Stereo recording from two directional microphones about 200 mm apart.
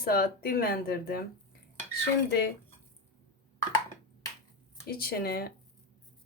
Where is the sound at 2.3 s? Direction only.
55° left (ahead or behind).